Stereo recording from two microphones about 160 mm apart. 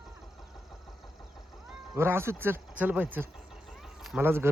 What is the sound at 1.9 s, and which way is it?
Speech, 15° right (ahead or behind).